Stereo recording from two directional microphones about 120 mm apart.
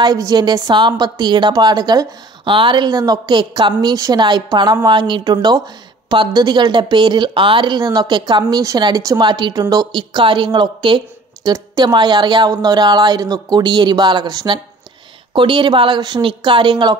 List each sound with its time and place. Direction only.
0.0 s a woman's voice: 30° right (ahead or behind)